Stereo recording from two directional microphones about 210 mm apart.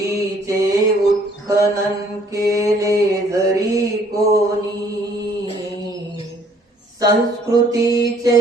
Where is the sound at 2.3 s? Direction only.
15° right (ahead or behind).